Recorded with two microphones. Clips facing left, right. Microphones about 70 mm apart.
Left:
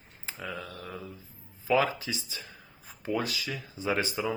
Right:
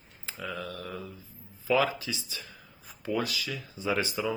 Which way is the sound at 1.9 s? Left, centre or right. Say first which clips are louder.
Even; left.